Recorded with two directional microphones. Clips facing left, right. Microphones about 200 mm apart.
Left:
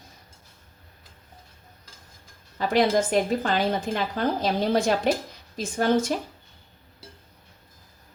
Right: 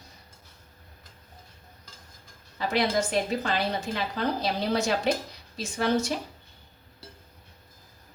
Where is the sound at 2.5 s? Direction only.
50° left (ahead or behind).